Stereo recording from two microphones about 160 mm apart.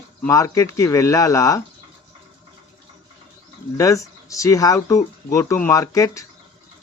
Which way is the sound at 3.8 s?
20° left (ahead or behind).